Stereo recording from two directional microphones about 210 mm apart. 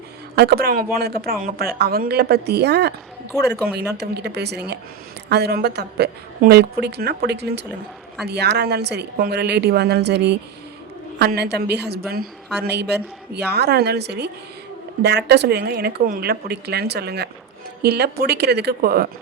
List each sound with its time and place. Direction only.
0.3 s speech: 50° right (ahead or behind)